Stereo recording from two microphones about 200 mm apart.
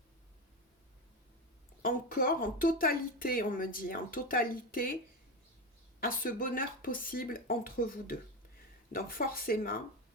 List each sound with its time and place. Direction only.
1.8 s speech: 45° left (ahead or behind)
6.0 s speech: 45° left (ahead or behind)